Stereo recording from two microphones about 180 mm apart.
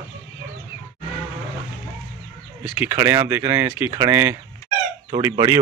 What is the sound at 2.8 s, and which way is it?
Speech, 10° right (ahead or behind).